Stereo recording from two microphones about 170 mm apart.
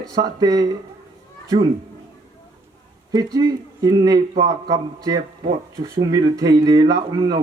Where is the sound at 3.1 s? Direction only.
20° right (ahead or behind).